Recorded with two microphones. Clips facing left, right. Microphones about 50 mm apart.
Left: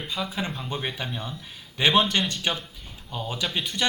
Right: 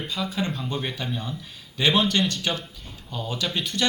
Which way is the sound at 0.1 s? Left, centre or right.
Centre.